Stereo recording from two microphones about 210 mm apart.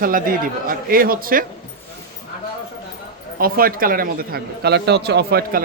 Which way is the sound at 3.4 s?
45° right (ahead or behind).